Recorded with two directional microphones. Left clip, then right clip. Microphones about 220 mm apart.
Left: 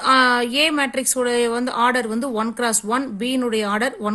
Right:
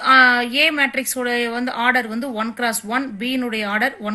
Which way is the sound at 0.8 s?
50° left (ahead or behind).